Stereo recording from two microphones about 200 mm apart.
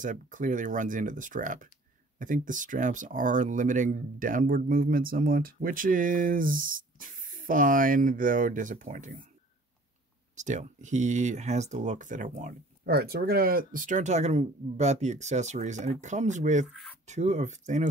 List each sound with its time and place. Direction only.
0.0 s speech: 40° right (ahead or behind)
10.3 s speech: 35° right (ahead or behind)
12.8 s speech: 50° right (ahead or behind)
16.6 s speech: 5° left (ahead or behind)
17.0 s speech: 35° right (ahead or behind)